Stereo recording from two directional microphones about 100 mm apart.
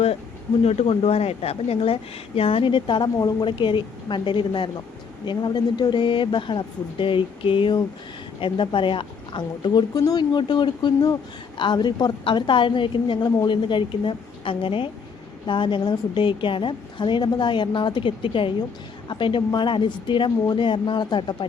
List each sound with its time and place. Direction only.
0.6 s a woman's voice: 90° left; by 21.3 s 50° left (ahead or behind)